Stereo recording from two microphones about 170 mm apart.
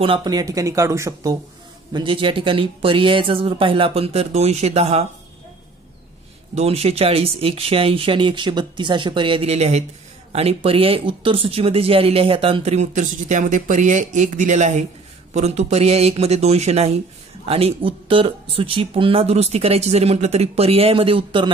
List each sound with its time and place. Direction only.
0.0 s speech: 25° right (ahead or behind)
6.5 s speech: 35° right (ahead or behind)